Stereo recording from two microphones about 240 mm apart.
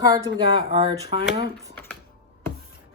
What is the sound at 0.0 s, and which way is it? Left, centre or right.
A woman's voice, centre.